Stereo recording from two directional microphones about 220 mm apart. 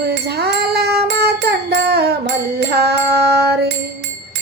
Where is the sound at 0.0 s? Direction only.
50° right (ahead or behind).